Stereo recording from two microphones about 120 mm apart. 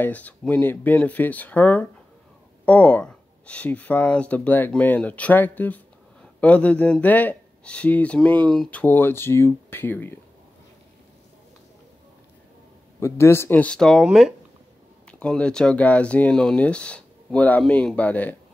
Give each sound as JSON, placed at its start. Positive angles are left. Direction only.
{"t": 0.0, "sound": "speech", "side_deg": 15}
{"t": 13.0, "sound": "speech", "side_deg": 20}